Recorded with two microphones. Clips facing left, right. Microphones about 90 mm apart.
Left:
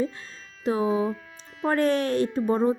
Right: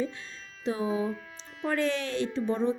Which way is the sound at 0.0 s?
40° left (ahead or behind).